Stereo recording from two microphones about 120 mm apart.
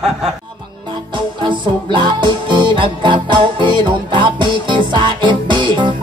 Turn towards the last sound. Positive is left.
turn(degrees=-40)  # may be behind; listen again after turning